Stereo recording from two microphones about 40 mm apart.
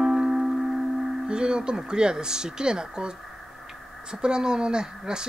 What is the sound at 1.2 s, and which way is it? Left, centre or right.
Speech, right.